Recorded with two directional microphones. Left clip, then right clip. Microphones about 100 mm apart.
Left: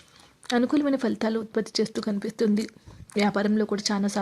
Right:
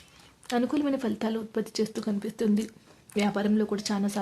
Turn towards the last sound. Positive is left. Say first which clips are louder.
# left 3 dB
turn(degrees=45)  # may be behind; listen again after turning